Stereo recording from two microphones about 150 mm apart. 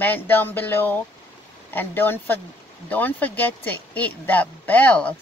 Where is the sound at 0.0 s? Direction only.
15° left (ahead or behind).